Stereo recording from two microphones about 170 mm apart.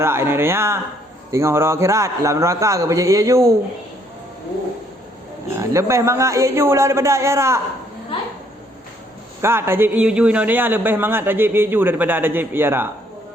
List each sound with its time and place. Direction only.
0.0 s a man's voice: 15° right (ahead or behind)
5.5 s a man's voice: 15° right (ahead or behind)
9.4 s a man's voice: 15° right (ahead or behind)